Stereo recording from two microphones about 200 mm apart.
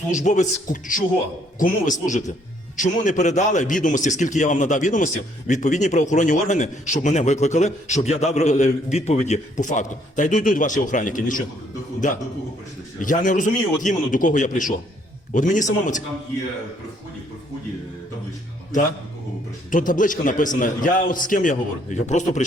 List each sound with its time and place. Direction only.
0.1 s a man's voice: 35° left (ahead or behind)
19.7 s a man's voice: 40° left (ahead or behind)